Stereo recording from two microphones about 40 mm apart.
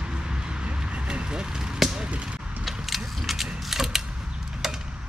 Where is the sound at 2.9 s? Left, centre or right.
Centre.